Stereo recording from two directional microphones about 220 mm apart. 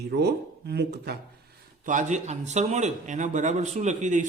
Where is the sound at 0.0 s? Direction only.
50° right (ahead or behind).